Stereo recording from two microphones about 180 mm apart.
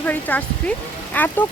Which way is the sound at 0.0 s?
10° left (ahead or behind).